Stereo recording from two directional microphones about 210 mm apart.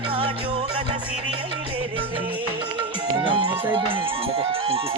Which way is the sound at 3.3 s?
25° right (ahead or behind).